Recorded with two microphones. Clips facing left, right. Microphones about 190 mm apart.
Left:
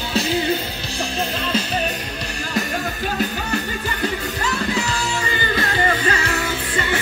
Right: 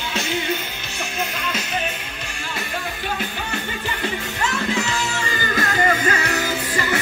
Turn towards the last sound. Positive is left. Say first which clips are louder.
# even
turn(degrees=30)  # may be behind; listen again after turning